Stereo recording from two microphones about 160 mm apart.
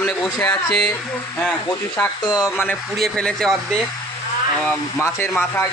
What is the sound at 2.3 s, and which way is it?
Speech, 15° left (ahead or behind).